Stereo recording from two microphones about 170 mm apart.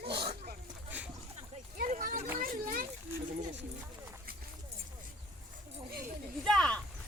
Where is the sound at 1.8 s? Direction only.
50° right (ahead or behind).